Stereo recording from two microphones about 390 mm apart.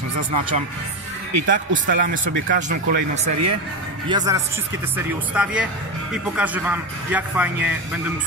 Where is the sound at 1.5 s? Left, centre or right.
Right.